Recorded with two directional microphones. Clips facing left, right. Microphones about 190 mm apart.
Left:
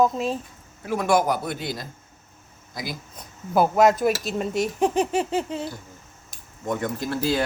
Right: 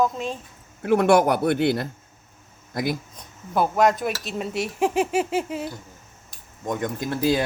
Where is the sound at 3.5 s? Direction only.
5° left (ahead or behind).